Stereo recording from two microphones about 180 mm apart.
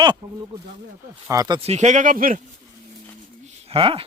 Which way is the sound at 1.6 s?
40° right (ahead or behind).